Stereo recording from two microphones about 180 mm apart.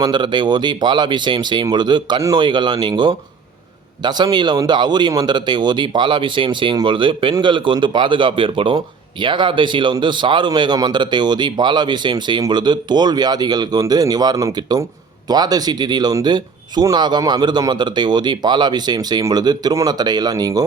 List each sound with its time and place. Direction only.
0.0 s speech: 25° right (ahead or behind)